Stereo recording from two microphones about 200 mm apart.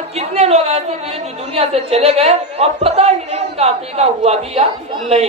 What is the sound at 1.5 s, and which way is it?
A woman's voice, 30° right (ahead or behind).